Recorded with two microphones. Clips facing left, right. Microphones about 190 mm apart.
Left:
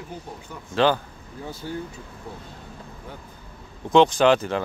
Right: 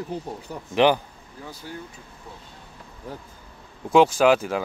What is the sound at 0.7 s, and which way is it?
Speech, 15° right (ahead or behind).